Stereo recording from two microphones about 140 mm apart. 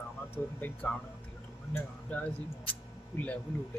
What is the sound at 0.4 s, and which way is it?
Speech, 15° left (ahead or behind).